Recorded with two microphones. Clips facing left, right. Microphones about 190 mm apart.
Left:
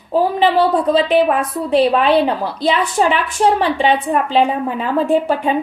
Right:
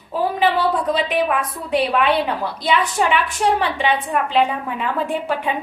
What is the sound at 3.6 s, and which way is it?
A woman's voice, 30° left (ahead or behind).